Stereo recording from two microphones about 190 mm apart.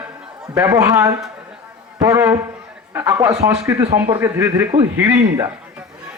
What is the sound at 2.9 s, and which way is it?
Speech, 15° right (ahead or behind).